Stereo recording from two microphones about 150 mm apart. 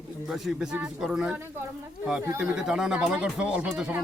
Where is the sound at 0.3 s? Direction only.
5° right (ahead or behind).